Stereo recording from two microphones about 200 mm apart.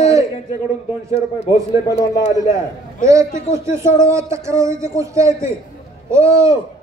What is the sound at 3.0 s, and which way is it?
Speech, 15° right (ahead or behind).